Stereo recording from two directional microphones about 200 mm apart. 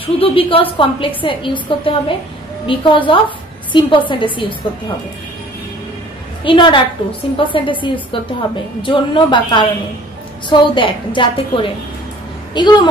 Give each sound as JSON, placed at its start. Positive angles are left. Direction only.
{"t": 0.0, "sound": "a woman's voice", "side_deg": 25}
{"t": 6.4, "sound": "a woman's voice", "side_deg": 25}